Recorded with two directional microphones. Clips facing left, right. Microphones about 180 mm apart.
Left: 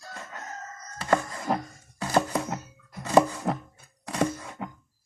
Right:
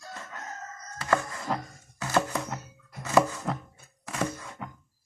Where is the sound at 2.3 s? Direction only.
25° left (ahead or behind).